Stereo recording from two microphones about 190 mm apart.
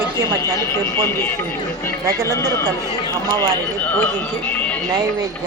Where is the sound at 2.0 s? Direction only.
15° right (ahead or behind).